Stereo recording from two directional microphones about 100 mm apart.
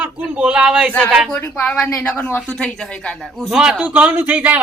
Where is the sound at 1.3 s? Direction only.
20° left (ahead or behind).